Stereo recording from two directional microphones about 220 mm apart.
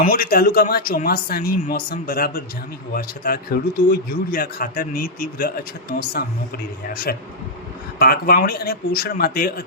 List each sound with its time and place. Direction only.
0.0 s a man's voice: 40° left (ahead or behind)